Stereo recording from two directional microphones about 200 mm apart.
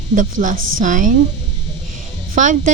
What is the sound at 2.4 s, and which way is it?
Speech, 40° right (ahead or behind).